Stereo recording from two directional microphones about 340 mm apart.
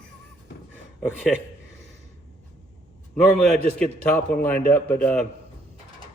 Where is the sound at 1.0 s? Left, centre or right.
Centre.